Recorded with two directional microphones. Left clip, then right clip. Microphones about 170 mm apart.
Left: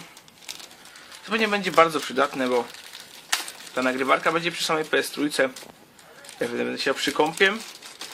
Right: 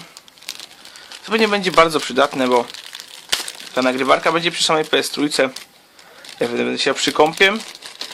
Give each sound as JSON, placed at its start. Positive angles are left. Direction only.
{"t": 1.3, "sound": "speech", "side_deg": -45}
{"t": 3.8, "sound": "speech", "side_deg": -45}